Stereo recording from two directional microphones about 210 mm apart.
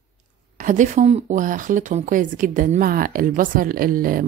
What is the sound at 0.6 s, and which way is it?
Speech, 35° right (ahead or behind).